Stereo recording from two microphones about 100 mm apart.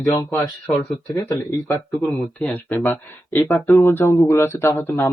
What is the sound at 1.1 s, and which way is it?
Speech, 40° left (ahead or behind).